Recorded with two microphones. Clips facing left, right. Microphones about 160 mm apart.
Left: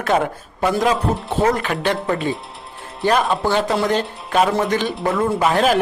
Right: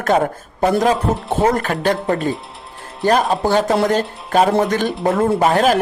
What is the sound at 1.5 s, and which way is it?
Speech, 45° right (ahead or behind).